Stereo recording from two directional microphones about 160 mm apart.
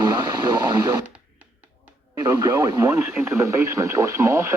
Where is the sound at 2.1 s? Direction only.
25° right (ahead or behind).